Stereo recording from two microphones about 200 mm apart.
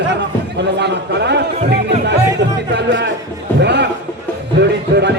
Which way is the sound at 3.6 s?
60° right (ahead or behind).